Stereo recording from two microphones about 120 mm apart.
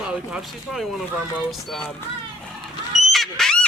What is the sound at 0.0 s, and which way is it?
Speech, 5° right (ahead or behind).